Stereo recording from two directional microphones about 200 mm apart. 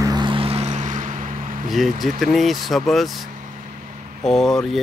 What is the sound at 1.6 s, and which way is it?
Speech, centre (ahead or behind).